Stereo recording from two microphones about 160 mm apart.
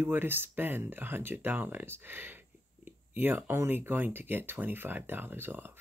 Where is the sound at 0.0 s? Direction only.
15° right (ahead or behind).